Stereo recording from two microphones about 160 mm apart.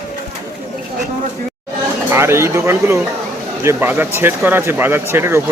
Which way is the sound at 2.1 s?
15° right (ahead or behind).